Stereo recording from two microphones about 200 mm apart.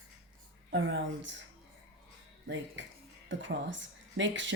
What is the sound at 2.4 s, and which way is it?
Speech, 65° right (ahead or behind).